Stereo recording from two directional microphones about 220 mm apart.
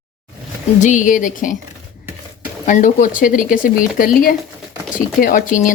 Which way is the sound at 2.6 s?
35° left (ahead or behind).